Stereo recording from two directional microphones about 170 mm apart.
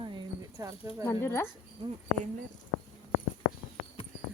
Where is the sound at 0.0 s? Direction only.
25° right (ahead or behind).